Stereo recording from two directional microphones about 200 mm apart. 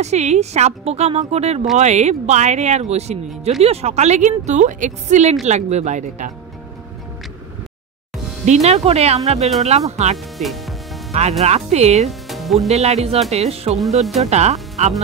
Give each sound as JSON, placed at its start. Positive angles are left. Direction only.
{"t": 0.0, "sound": "speech", "side_deg": -35}
{"t": 8.6, "sound": "speech", "side_deg": -30}
{"t": 10.1, "sound": "music", "side_deg": 0}
{"t": 11.4, "sound": "speech", "side_deg": -35}
{"t": 12.1, "sound": "music", "side_deg": 0}
{"t": 12.6, "sound": "speech", "side_deg": -35}